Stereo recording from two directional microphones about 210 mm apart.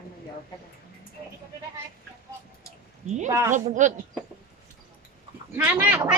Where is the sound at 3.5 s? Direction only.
35° right (ahead or behind).